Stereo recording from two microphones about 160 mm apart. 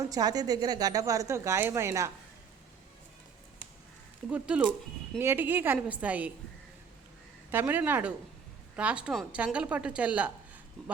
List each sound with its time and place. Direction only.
0.0 s a woman's voice: 25° right (ahead or behind)
4.3 s a woman's voice: 10° right (ahead or behind)
7.5 s a woman's voice: 10° right (ahead or behind)